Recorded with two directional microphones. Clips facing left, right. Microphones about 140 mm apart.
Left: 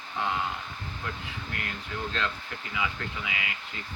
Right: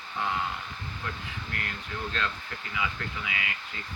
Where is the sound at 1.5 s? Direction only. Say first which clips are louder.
Even; 20° left (ahead or behind).